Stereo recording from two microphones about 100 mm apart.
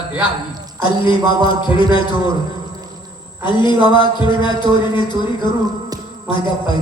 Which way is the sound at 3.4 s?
50° left (ahead or behind).